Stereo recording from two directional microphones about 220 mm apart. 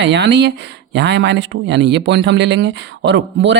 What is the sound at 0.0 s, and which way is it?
Speech, 50° right (ahead or behind).